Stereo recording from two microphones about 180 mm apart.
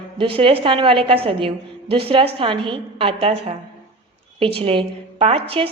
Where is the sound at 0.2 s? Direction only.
30° right (ahead or behind).